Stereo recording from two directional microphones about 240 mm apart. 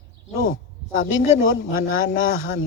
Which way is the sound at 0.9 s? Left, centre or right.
Left.